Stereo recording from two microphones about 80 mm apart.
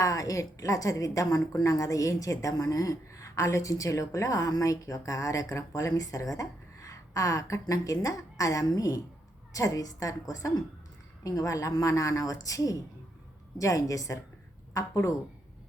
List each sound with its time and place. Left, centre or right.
0.0 s a woman's voice: left